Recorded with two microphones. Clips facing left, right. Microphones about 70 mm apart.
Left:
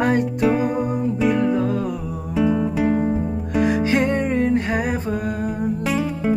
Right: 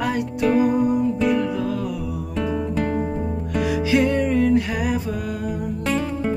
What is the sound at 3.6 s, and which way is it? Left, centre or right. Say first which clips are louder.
Music: even; left.